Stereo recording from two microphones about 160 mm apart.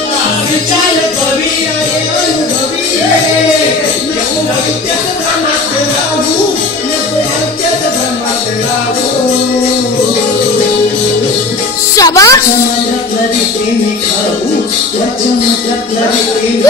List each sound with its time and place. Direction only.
12.0 s music: 20° left (ahead or behind)